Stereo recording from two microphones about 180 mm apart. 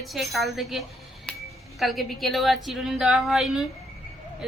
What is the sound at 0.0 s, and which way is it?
A woman's voice, centre (ahead or behind).